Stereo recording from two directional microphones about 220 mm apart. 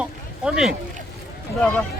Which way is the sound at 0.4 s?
5° right (ahead or behind).